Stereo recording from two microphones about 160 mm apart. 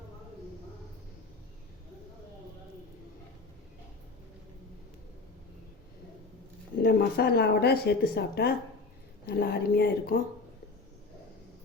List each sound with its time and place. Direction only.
6.8 s speech: 75° left (ahead or behind)